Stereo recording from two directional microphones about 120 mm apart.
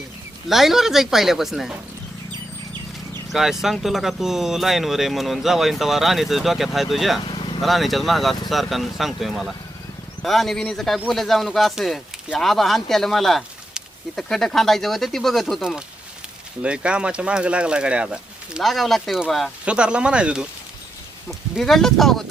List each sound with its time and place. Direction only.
0.4 s speech: centre (ahead or behind)
3.3 s speech: 5° right (ahead or behind)
7.3 s vehicle: 45° left (ahead or behind)
7.6 s speech: centre (ahead or behind)